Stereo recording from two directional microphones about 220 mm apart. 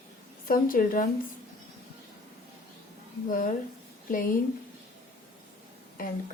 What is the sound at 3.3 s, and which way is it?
Speech, 40° left (ahead or behind).